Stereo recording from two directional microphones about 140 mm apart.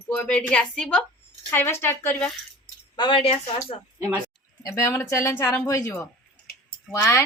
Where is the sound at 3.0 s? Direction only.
40° left (ahead or behind).